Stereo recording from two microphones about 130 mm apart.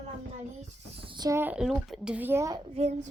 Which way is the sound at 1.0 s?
35° right (ahead or behind).